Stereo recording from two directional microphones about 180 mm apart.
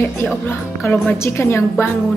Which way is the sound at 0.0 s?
10° left (ahead or behind).